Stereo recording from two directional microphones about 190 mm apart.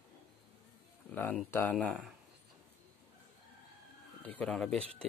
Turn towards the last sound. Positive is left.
turn(degrees=5)  # may be behind; listen again after turning